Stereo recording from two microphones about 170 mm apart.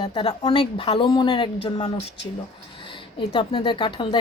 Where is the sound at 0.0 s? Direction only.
25° left (ahead or behind).